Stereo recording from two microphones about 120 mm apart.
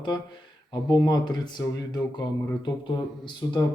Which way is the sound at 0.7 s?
40° left (ahead or behind).